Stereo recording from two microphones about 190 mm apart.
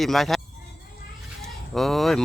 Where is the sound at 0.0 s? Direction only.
Centre (ahead or behind).